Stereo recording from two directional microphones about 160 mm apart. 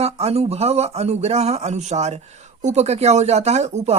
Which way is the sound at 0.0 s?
40° right (ahead or behind).